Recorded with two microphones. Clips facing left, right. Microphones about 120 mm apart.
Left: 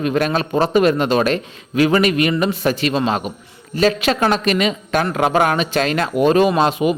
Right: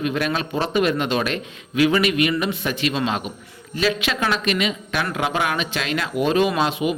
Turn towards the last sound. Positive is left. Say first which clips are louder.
# left 5 dB
turn(degrees=45)  # may be behind; listen again after turning